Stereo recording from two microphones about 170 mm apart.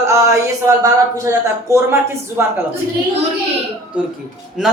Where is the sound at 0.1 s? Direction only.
15° right (ahead or behind).